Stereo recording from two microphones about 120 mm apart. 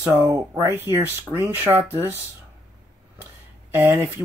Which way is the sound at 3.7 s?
20° right (ahead or behind).